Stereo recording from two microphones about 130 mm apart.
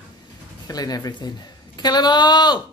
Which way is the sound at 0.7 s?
30° left (ahead or behind).